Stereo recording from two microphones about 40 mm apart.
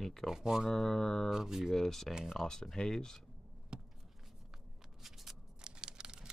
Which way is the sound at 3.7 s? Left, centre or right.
Right.